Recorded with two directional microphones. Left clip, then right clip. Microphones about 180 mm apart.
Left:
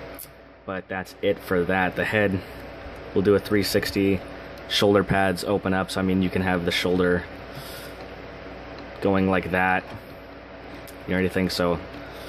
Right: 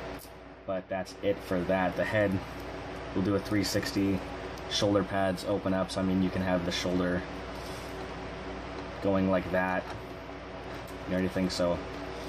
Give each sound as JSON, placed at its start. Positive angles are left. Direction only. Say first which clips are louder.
{"t": 0.9, "sound": "speech", "louder": "left 8 dB", "side_deg": 55}
{"t": 3.3, "sound": "speech", "louder": "left 9 dB", "side_deg": 55}
{"t": 9.0, "sound": "speech", "louder": "left 6 dB", "side_deg": 60}
{"t": 11.1, "sound": "speech", "louder": "left 7 dB", "side_deg": 55}